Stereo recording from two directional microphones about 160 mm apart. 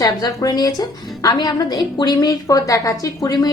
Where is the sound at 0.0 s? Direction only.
25° left (ahead or behind).